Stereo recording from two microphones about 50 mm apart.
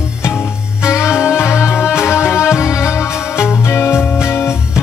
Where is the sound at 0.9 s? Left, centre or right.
Left.